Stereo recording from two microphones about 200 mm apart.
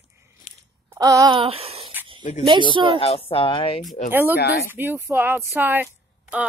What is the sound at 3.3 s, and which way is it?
Speech, 25° left (ahead or behind).